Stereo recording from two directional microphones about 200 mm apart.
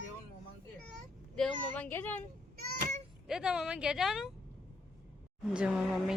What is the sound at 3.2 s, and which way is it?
A woman's voice, 5° right (ahead or behind).